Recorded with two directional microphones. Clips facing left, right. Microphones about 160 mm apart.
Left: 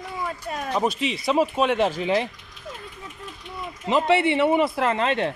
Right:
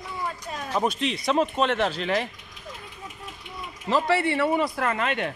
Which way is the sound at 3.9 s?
20° left (ahead or behind).